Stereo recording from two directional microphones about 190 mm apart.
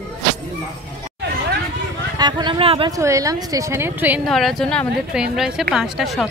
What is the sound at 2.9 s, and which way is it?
Speech, 15° right (ahead or behind).